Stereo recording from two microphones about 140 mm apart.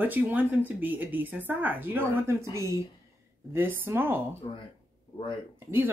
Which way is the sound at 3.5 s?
15° right (ahead or behind).